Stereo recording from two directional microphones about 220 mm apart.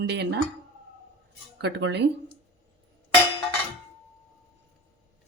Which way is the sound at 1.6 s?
50° right (ahead or behind).